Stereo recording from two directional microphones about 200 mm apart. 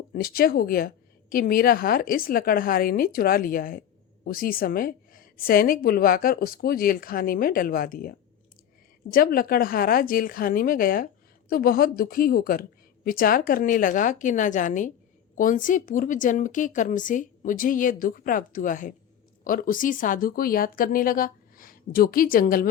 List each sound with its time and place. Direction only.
0.1 s a woman's voice: 45° left (ahead or behind)